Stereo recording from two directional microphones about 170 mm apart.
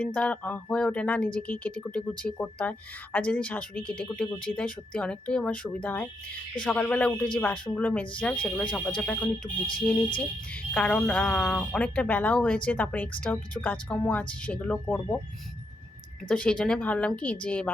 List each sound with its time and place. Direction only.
0.0 s speech: 10° left (ahead or behind)
16.3 s speech: 5° left (ahead or behind)